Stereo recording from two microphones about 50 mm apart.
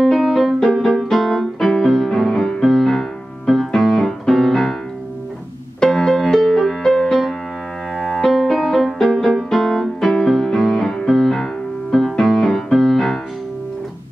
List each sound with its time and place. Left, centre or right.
0.0 s music: centre
5.8 s music: centre